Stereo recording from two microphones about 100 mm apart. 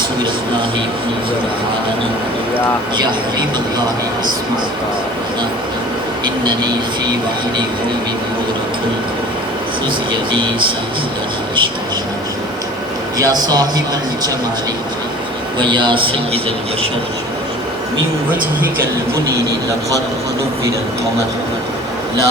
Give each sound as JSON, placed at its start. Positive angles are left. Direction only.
{"t": 6.2, "sound": "a man's voice", "side_deg": -45}
{"t": 10.1, "sound": "a man's voice", "side_deg": -55}
{"t": 13.1, "sound": "a man's voice", "side_deg": -40}
{"t": 15.5, "sound": "a man's voice", "side_deg": -50}